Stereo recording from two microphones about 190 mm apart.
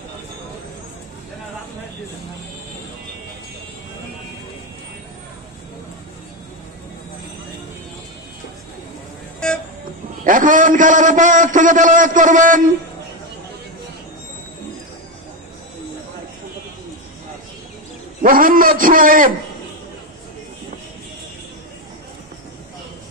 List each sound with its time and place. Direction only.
10.2 s a man's voice: 45° right (ahead or behind)
18.2 s a man's voice: 45° right (ahead or behind)